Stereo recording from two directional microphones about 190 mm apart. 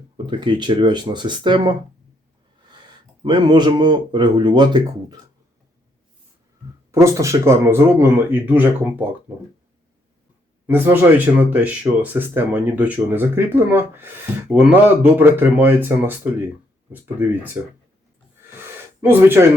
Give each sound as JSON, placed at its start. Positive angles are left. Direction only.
{"t": 0.3, "sound": "speech", "side_deg": -25}
{"t": 3.2, "sound": "speech", "side_deg": -25}
{"t": 6.9, "sound": "speech", "side_deg": -15}
{"t": 10.7, "sound": "speech", "side_deg": -10}
{"t": 19.0, "sound": "speech", "side_deg": -10}